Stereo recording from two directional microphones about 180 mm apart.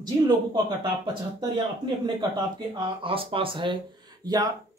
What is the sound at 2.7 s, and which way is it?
Speech, 30° right (ahead or behind).